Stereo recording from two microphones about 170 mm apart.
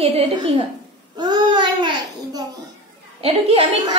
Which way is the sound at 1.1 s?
25° right (ahead or behind).